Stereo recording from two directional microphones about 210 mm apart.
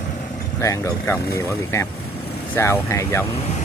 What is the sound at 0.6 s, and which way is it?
Speech, 15° left (ahead or behind).